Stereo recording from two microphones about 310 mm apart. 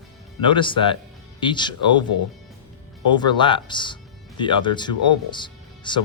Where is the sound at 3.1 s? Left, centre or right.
Centre.